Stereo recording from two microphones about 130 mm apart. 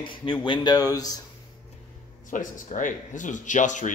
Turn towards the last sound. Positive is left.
turn(degrees=75)  # may be behind; listen again after turning